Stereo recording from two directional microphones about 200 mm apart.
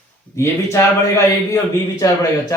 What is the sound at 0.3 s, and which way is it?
Speech, 15° left (ahead or behind).